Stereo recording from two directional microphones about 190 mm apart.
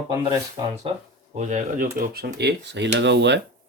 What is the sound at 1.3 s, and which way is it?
Speech, 40° right (ahead or behind).